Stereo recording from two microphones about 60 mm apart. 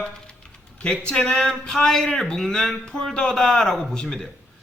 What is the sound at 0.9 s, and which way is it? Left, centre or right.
A man's voice, centre.